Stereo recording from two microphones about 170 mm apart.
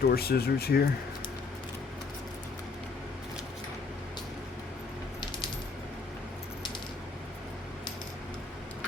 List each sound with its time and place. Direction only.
0.0 s speech: 65° left (ahead or behind)